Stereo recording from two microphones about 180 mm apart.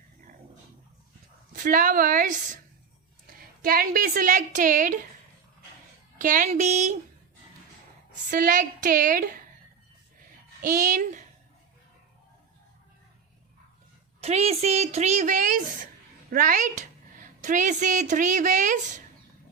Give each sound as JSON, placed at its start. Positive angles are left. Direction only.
{"t": 1.5, "sound": "a woman's voice", "side_deg": -50}
{"t": 3.6, "sound": "a woman's voice", "side_deg": -55}
{"t": 6.1, "sound": "a woman's voice", "side_deg": -45}
{"t": 8.1, "sound": "a woman's voice", "side_deg": -50}
{"t": 10.6, "sound": "a woman's voice", "side_deg": -45}
{"t": 14.2, "sound": "a woman's voice", "side_deg": -35}